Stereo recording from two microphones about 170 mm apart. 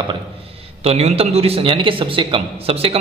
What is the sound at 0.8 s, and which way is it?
Speech, 35° right (ahead or behind).